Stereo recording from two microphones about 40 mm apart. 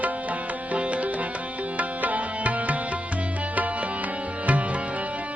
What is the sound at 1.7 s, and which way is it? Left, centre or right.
Music, right.